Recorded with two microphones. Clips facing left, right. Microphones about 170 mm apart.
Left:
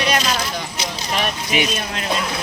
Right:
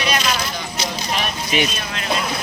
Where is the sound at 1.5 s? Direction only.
15° left (ahead or behind).